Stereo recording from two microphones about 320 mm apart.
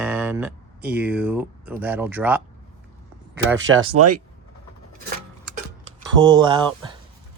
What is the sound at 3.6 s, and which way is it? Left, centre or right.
Speech, right.